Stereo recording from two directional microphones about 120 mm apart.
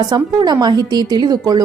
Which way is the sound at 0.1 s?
35° right (ahead or behind).